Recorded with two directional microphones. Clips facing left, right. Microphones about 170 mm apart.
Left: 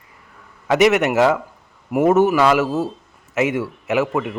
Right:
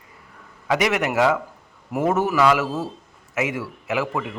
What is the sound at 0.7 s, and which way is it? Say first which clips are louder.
A man's voice: left 6 dB; 25° left (ahead or behind).